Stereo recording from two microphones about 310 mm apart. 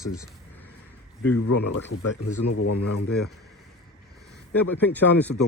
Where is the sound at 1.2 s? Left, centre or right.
Left.